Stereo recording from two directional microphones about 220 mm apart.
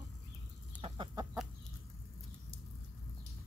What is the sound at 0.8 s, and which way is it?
Chicken, 20° right (ahead or behind).